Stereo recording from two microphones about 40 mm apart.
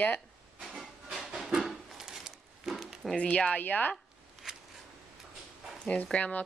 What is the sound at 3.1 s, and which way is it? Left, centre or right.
Speech, left.